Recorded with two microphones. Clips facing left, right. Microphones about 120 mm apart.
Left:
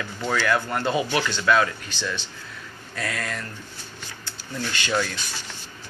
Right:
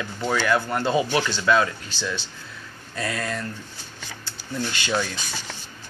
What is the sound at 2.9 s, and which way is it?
Speech, 25° right (ahead or behind).